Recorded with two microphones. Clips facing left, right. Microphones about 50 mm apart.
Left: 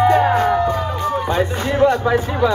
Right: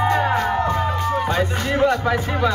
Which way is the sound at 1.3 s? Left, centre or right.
Left.